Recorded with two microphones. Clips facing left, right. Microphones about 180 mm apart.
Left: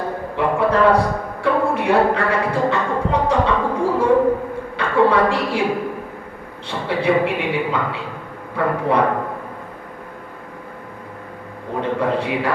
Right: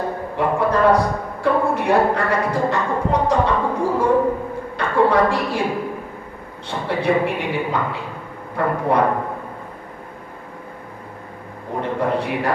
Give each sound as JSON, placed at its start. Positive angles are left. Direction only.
{"t": 0.3, "sound": "a man's voice", "side_deg": 65}
{"t": 6.7, "sound": "a man's voice", "side_deg": 65}
{"t": 11.8, "sound": "a man's voice", "side_deg": 65}